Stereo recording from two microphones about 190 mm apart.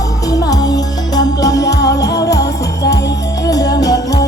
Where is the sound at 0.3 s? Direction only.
20° left (ahead or behind).